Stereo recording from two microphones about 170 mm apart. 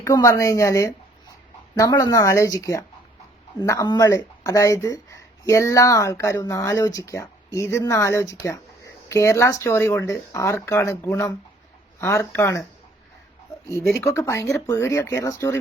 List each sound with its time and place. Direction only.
0.0 s speech: 20° left (ahead or behind)
14.0 s speech: 15° left (ahead or behind)